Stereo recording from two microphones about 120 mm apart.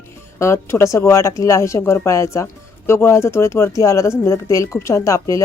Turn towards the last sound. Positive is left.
turn(degrees=25)  # may be behind; listen again after turning